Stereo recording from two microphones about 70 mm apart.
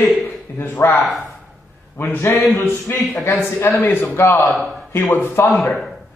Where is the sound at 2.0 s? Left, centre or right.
Left.